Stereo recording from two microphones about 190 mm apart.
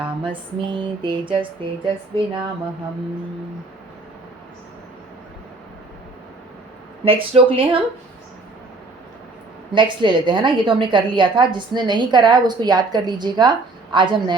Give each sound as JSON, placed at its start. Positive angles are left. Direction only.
{"t": 0.0, "sound": "a woman's voice", "side_deg": -25}
{"t": 7.0, "sound": "a woman's voice", "side_deg": -30}
{"t": 9.7, "sound": "a woman's voice", "side_deg": -25}